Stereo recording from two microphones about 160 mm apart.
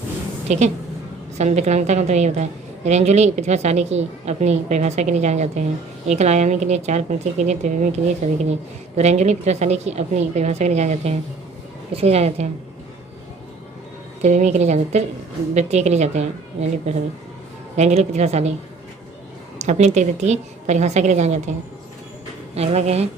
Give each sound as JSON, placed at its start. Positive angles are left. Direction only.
{"t": 0.4, "sound": "a woman's voice", "side_deg": -45}
{"t": 14.2, "sound": "a woman's voice", "side_deg": -45}
{"t": 19.5, "sound": "a woman's voice", "side_deg": -45}
{"t": 22.5, "sound": "a woman's voice", "side_deg": -40}